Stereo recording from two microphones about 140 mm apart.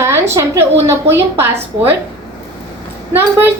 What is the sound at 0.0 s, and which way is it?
A woman's voice, 20° right (ahead or behind).